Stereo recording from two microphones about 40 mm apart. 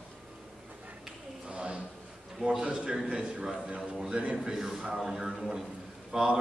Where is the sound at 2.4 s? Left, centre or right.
Centre.